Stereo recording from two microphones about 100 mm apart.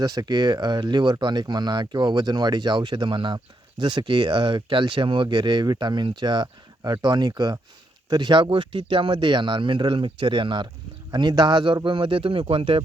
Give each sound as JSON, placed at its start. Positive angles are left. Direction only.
{"t": 0.0, "sound": "speech", "side_deg": -40}